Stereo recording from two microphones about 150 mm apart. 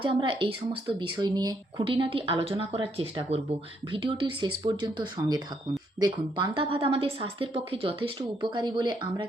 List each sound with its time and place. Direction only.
0.0 s a woman's voice: 35° right (ahead or behind)